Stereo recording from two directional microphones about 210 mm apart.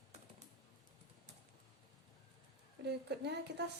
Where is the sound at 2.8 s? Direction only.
50° right (ahead or behind).